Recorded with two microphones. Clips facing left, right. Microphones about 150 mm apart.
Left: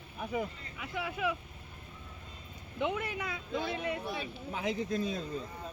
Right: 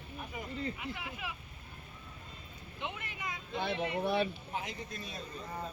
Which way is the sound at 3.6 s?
65° right (ahead or behind).